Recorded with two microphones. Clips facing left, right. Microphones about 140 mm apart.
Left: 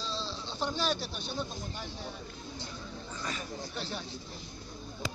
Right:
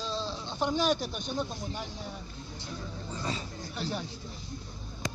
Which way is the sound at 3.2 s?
30° right (ahead or behind).